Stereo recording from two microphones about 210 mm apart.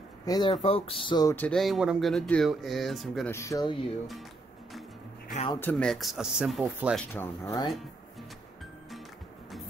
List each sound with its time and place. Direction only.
0.2 s speech: 20° left (ahead or behind)
1.3 s speech: 5° left (ahead or behind)
3.3 s speech: 15° left (ahead or behind)
5.5 s speech: 10° left (ahead or behind)
7.2 s speech: 15° left (ahead or behind)